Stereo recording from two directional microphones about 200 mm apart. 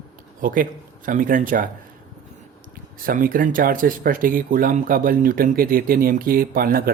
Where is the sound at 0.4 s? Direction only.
45° right (ahead or behind).